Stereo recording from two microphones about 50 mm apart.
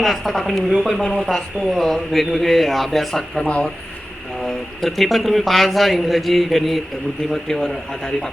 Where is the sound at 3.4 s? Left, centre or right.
Centre.